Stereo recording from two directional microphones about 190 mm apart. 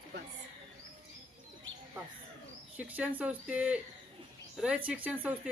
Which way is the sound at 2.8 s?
10° right (ahead or behind).